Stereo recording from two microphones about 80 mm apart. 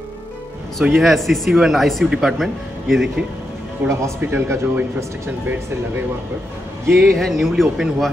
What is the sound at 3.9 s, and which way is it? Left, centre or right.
Speech, right.